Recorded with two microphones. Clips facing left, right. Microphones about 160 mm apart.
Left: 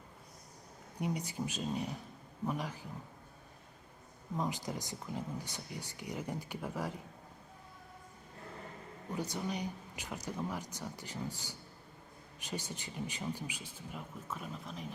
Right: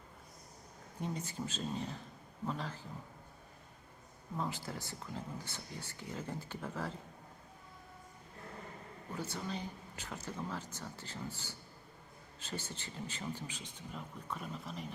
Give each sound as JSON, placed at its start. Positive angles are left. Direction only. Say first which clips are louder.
{"t": 0.9, "sound": "speech", "louder": "left 3 dB", "side_deg": 15}
{"t": 4.4, "sound": "speech", "louder": "left 3 dB", "side_deg": 15}
{"t": 9.1, "sound": "speech", "louder": "left 3 dB", "side_deg": 15}